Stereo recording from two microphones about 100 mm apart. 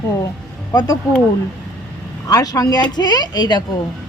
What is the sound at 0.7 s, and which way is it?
Speech, 40° left (ahead or behind).